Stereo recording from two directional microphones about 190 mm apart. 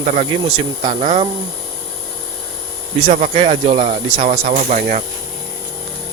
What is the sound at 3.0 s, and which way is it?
Speech, 30° right (ahead or behind).